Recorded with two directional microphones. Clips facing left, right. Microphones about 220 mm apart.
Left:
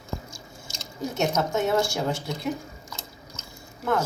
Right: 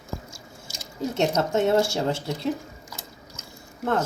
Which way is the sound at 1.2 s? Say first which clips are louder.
Right 2 dB; 30° right (ahead or behind).